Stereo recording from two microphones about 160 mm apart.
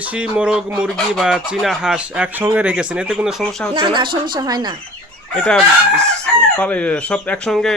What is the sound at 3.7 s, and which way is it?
Speech, 30° right (ahead or behind).